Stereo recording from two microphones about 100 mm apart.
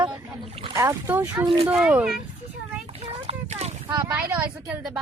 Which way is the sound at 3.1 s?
90° right.